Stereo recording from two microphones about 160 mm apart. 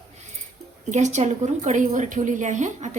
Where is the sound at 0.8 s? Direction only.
45° right (ahead or behind).